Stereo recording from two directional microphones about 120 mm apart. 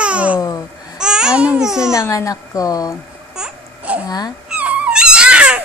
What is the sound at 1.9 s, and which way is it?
A woman's voice, 25° left (ahead or behind).